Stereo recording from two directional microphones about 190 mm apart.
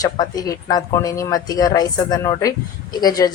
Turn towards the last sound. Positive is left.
turn(degrees=20)  # may be behind; listen again after turning